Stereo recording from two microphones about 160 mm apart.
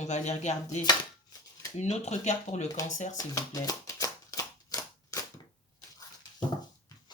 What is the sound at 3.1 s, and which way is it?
Shuffling cards, 20° left (ahead or behind).